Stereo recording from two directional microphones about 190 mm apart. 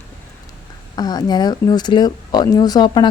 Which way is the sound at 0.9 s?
20° left (ahead or behind).